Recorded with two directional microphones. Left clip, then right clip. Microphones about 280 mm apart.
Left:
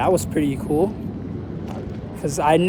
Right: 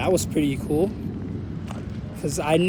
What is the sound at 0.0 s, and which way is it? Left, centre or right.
Speech, centre.